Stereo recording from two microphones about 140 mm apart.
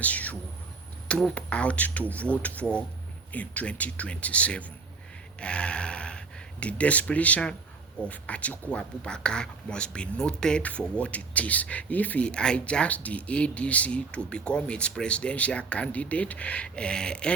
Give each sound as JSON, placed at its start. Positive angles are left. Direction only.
{"t": 0.0, "sound": "speech", "side_deg": 10}